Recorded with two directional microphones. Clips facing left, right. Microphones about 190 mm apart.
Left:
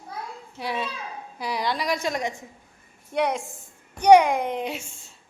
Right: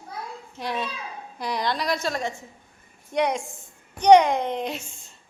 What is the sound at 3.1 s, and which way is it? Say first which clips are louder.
A child's voice: right 1 dB; 5° left (ahead or behind).